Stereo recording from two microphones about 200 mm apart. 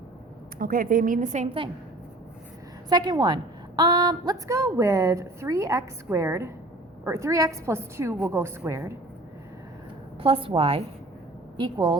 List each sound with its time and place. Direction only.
0.6 s a woman's voice: 45° right (ahead or behind)
2.9 s a woman's voice: 20° right (ahead or behind)
10.2 s a woman's voice: 25° right (ahead or behind)